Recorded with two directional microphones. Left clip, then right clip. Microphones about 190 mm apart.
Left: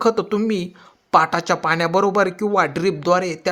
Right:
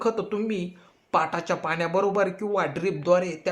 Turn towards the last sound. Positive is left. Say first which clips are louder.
# left 4 dB
turn(degrees=50)  # may be behind; listen again after turning